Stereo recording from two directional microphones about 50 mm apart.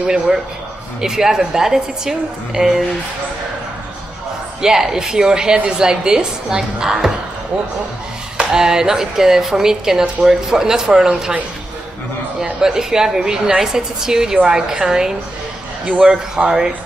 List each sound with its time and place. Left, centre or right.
0.0 s speech: centre
4.6 s speech: centre
8.4 s speech: centre
12.4 s speech: centre